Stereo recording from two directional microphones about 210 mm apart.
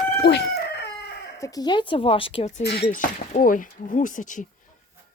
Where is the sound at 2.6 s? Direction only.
50° left (ahead or behind).